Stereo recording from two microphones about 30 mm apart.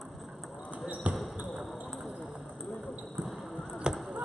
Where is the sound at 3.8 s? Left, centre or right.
Right.